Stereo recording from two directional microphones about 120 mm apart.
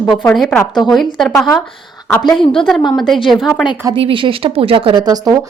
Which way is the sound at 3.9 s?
45° right (ahead or behind).